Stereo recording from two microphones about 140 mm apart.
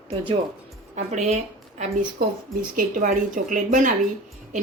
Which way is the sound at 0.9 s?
55° right (ahead or behind).